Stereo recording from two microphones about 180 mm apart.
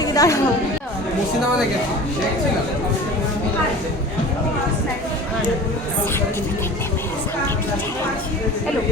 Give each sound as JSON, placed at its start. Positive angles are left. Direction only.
{"t": 0.0, "sound": "chatter", "side_deg": 20}